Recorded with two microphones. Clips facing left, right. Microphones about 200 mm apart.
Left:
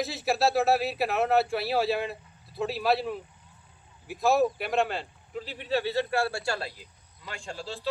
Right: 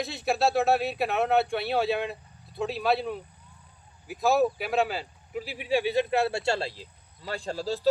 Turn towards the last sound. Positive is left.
turn(degrees=-40)  # may be behind; listen again after turning